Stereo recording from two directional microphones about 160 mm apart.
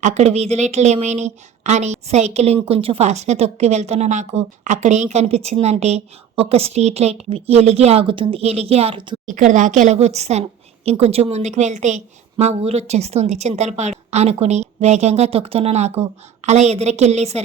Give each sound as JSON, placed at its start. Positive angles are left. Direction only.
{"t": 0.0, "sound": "a woman's voice", "side_deg": -45}
{"t": 9.2, "sound": "a woman's voice", "side_deg": -55}